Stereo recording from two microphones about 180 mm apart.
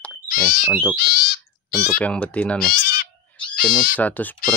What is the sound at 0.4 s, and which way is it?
Speech, 5° left (ahead or behind).